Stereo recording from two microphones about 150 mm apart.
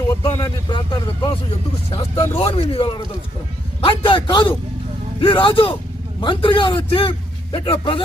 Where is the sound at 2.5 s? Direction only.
40° left (ahead or behind).